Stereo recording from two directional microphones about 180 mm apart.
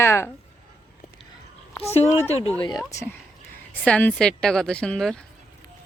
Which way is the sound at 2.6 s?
20° left (ahead or behind).